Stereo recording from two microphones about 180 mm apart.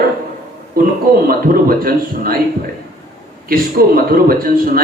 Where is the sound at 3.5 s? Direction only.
55° right (ahead or behind).